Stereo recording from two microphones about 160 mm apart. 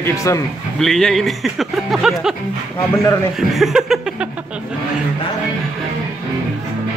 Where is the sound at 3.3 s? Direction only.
Centre (ahead or behind).